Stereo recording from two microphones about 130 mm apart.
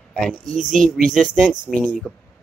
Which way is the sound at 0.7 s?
90° right.